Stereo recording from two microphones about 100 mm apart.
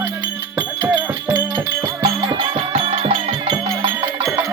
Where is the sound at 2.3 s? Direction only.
65° right (ahead or behind).